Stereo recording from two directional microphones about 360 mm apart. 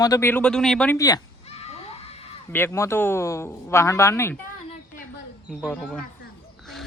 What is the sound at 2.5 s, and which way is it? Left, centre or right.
A man's voice, centre.